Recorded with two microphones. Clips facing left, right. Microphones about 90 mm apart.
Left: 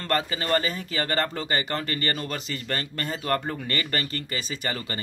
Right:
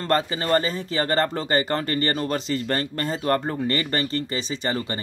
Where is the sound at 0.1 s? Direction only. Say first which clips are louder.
Right 3 dB; 30° right (ahead or behind).